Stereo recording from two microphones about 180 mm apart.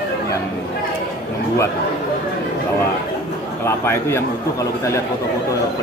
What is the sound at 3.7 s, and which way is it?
Speech, 15° left (ahead or behind).